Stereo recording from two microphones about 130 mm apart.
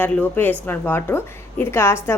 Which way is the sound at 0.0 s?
15° left (ahead or behind).